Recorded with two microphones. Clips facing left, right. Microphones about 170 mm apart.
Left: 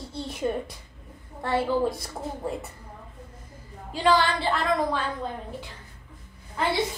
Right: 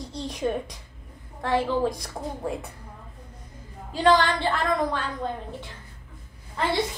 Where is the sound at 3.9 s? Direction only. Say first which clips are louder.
Right 2 dB; 10° left (ahead or behind).